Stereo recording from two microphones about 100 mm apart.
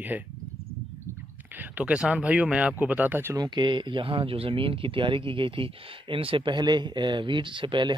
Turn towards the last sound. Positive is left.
turn(degrees=-55)  # may be behind; listen again after turning